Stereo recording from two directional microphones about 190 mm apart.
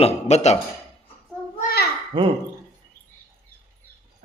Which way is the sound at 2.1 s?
25° right (ahead or behind).